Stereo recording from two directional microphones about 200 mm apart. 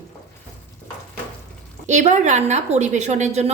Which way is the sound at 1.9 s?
35° right (ahead or behind).